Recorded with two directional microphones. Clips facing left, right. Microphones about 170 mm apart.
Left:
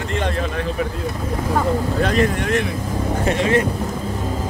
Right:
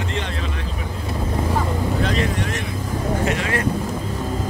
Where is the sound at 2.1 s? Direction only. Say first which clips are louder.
Left 4 dB; 50° left (ahead or behind).